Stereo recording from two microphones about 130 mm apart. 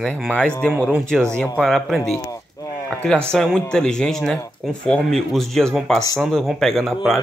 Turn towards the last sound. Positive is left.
turn(degrees=0)  # may be behind; listen again after turning